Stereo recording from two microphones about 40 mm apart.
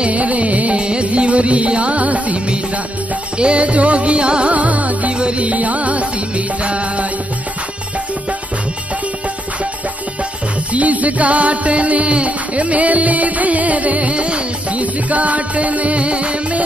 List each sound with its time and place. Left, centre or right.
0.0 s music: right
10.7 s music: right